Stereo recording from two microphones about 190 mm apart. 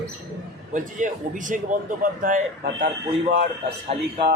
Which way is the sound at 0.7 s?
45° right (ahead or behind).